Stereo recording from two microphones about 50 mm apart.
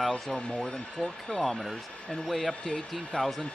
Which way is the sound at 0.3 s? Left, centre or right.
Centre.